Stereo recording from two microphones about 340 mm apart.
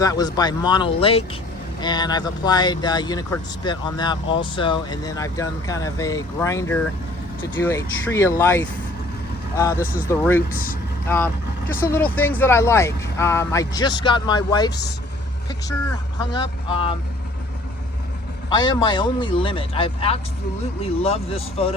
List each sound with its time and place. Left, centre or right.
0.0 s speech: centre
8.1 s speech: centre
9.8 s speech: left
10.1 s speech: centre
11.7 s speech: centre
16.3 s speech: centre
18.4 s speech: centre